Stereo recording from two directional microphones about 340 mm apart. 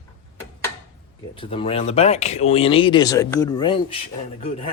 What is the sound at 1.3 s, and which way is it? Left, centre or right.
Speech, centre.